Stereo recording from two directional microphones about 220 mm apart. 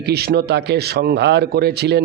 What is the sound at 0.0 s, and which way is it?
A man's voice, 45° right (ahead or behind).